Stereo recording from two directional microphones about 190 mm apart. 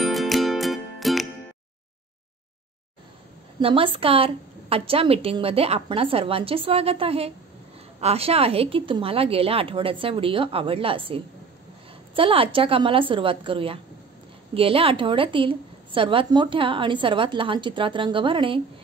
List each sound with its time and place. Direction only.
0.0 s music: centre (ahead or behind)
3.5 s a woman's voice: 30° right (ahead or behind)